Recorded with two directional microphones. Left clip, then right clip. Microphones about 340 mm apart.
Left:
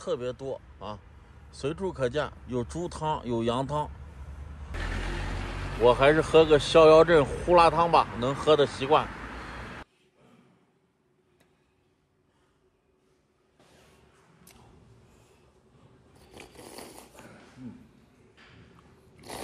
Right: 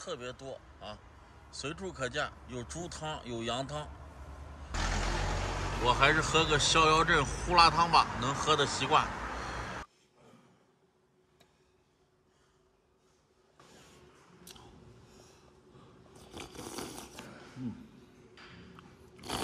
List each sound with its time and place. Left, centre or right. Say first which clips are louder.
1.5 s speech: left 8 dB; centre
5.9 s speech: left 6 dB; centre
16.7 s a sound: right 2 dB; right